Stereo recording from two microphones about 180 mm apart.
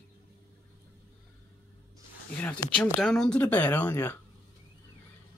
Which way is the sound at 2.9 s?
5° left (ahead or behind).